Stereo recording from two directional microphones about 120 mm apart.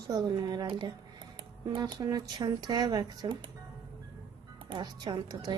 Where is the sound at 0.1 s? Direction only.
35° right (ahead or behind).